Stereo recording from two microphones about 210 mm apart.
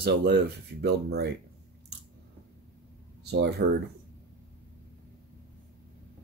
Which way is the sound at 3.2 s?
50° right (ahead or behind).